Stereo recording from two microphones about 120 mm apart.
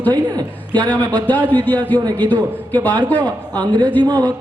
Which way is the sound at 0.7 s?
35° right (ahead or behind).